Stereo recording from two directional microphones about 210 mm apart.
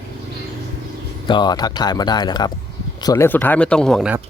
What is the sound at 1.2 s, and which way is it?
Speech, 20° left (ahead or behind).